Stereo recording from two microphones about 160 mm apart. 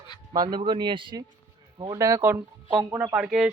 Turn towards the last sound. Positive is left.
turn(degrees=-5)  # may be behind; listen again after turning